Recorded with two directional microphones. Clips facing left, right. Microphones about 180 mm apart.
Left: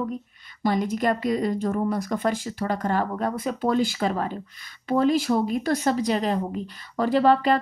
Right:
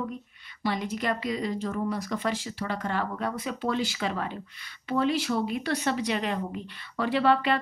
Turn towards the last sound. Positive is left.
turn(degrees=40)  # may be behind; listen again after turning